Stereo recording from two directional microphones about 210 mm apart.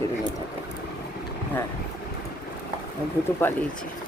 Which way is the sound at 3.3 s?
10° left (ahead or behind).